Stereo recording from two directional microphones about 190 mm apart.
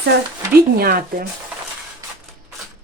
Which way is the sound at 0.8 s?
50° right (ahead or behind).